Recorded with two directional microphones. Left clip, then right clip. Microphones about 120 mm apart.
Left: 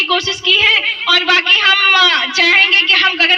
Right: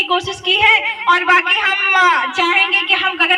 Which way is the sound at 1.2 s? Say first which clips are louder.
Left 2 dB; 25° left (ahead or behind).